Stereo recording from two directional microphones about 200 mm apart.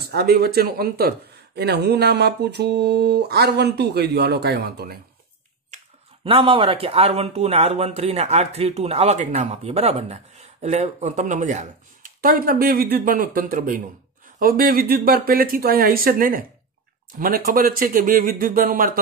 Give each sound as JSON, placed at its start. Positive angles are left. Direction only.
{"t": 0.1, "sound": "speech", "side_deg": -50}
{"t": 6.2, "sound": "speech", "side_deg": -25}